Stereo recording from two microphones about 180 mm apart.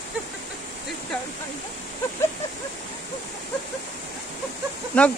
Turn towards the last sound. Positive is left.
turn(degrees=5)  # may be behind; listen again after turning